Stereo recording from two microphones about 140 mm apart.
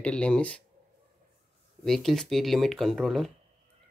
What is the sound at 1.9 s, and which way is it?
Speech, 5° left (ahead or behind).